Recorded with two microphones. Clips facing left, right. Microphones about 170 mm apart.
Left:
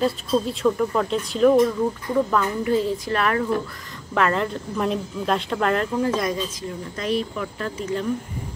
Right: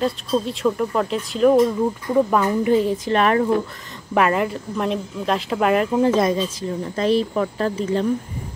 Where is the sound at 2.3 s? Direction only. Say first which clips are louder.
Right 4 dB; 20° right (ahead or behind).